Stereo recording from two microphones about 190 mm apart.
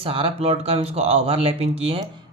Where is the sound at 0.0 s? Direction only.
30° right (ahead or behind).